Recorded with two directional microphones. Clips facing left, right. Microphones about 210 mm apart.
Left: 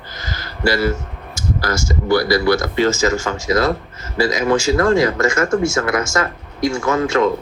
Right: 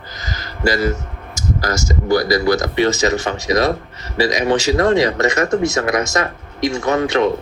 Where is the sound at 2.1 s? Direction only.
45° right (ahead or behind).